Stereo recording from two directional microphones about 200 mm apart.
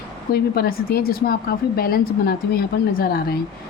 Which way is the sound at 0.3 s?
50° left (ahead or behind).